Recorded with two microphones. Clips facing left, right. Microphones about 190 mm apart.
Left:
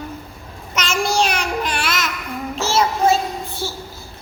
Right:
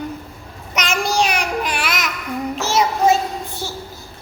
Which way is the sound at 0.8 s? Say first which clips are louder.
Even; 10° right (ahead or behind).